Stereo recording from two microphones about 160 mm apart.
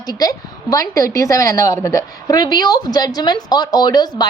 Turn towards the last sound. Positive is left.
turn(degrees=25)  # may be behind; listen again after turning